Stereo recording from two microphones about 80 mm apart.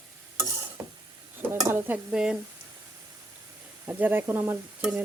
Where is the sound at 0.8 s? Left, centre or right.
Right.